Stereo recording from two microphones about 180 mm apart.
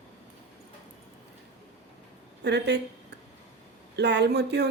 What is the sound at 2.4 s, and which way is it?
Speech, 70° right (ahead or behind).